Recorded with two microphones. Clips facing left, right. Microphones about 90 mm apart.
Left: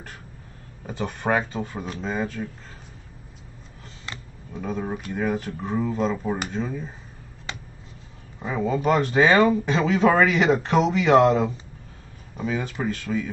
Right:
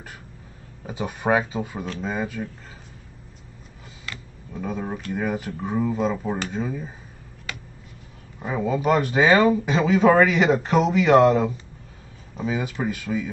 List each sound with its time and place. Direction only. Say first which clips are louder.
0.8 s speech: right 2 dB; 5° right (ahead or behind)
4.6 s speech: even; centre (ahead or behind)
7.5 s a sound: even; 25° left (ahead or behind)
8.5 s speech: even; 5° right (ahead or behind)